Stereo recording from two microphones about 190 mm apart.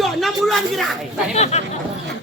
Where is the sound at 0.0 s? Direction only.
Centre (ahead or behind).